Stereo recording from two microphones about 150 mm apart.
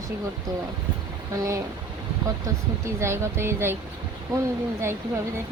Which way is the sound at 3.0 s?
15° right (ahead or behind).